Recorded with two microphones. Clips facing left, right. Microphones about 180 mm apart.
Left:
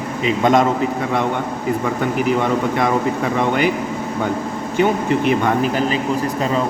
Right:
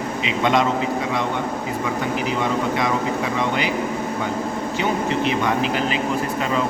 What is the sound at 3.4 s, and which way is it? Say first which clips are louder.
Speech: left 8 dB; 50° left (ahead or behind).